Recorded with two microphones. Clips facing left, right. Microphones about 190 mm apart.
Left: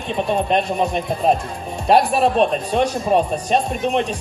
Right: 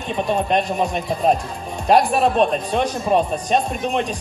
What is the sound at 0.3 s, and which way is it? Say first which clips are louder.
A man's voice: even; centre (ahead or behind).